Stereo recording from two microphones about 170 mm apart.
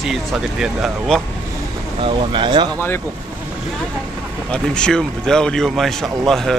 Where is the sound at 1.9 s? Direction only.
30° right (ahead or behind).